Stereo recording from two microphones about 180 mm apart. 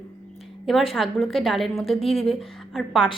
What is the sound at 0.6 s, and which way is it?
A woman's voice, centre (ahead or behind).